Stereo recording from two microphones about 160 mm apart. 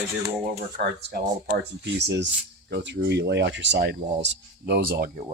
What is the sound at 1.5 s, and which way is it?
Speech, 90° right.